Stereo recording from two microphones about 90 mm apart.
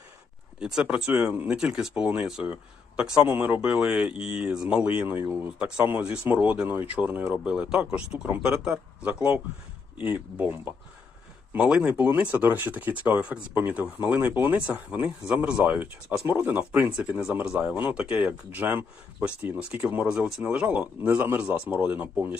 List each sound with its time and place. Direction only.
0.6 s speech: 10° right (ahead or behind)
11.5 s speech: 10° right (ahead or behind)